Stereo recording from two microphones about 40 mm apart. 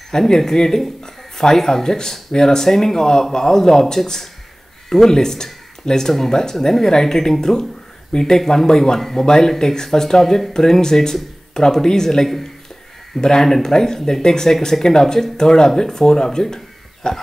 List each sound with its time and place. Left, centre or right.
0.1 s speech: centre